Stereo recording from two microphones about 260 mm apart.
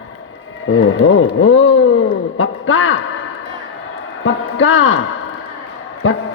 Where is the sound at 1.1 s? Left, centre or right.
Left.